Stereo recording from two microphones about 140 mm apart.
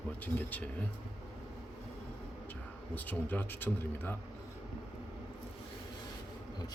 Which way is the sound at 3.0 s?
10° left (ahead or behind).